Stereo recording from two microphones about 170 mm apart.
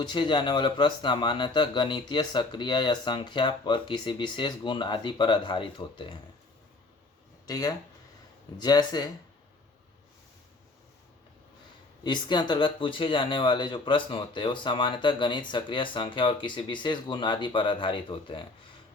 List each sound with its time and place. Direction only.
0.0 s speech: 25° left (ahead or behind)
7.4 s speech: 20° left (ahead or behind)
12.0 s speech: 25° left (ahead or behind)